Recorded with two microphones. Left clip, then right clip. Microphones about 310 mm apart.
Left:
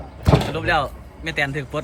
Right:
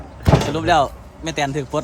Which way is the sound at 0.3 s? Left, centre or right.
Centre.